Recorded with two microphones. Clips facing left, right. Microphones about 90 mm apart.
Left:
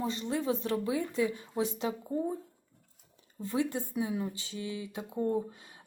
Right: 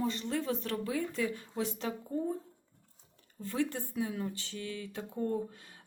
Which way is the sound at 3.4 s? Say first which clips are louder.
Left 2 dB; 15° left (ahead or behind).